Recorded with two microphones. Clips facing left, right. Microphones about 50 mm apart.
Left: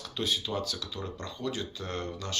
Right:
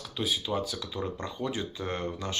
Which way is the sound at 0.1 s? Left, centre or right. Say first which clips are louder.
Right 1 dB; centre.